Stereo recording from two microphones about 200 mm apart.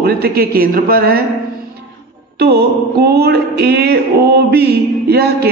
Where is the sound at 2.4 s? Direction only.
55° right (ahead or behind).